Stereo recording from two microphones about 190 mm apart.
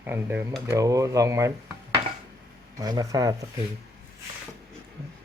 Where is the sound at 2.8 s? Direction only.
20° right (ahead or behind).